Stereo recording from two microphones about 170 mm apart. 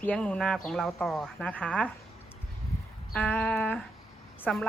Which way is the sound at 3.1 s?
5° left (ahead or behind).